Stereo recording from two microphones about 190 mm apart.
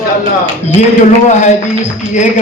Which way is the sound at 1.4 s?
40° left (ahead or behind).